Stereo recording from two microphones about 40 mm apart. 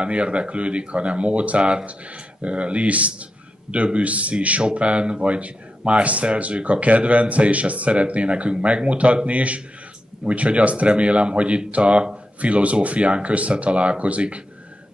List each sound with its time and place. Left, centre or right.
0.0 s speech: right